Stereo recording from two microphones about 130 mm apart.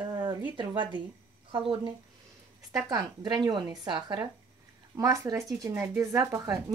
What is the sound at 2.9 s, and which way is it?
Speech, 30° right (ahead or behind).